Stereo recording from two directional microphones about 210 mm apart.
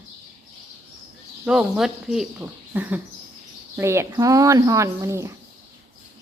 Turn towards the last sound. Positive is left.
turn(degrees=-15)  # may be behind; listen again after turning